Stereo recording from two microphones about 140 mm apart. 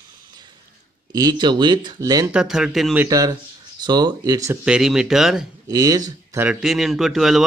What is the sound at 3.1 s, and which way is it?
Speech, 25° right (ahead or behind).